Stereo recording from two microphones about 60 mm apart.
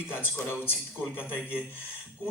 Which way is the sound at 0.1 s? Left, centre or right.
Left.